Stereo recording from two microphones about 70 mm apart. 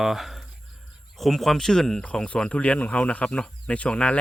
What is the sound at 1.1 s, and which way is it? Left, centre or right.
Speech, centre.